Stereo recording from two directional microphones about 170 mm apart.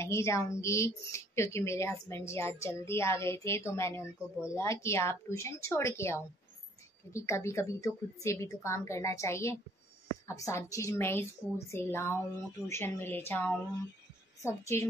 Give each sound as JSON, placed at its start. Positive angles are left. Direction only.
{"t": 0.0, "sound": "a woman's voice", "side_deg": 15}